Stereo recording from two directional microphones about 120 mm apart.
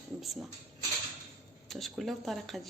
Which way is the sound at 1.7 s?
Centre (ahead or behind).